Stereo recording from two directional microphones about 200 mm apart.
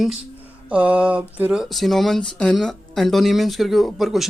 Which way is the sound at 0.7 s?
5° right (ahead or behind).